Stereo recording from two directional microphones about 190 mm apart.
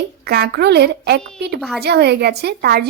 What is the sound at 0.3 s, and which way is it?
Speech, 55° right (ahead or behind).